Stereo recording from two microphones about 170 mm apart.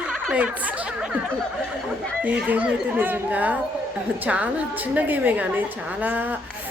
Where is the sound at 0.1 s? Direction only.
5° right (ahead or behind).